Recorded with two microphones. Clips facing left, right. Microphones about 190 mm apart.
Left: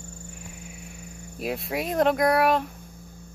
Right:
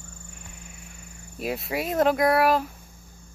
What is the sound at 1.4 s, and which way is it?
Speech, centre (ahead or behind).